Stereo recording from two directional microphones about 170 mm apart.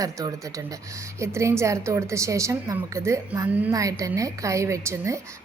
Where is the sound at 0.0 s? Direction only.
20° right (ahead or behind).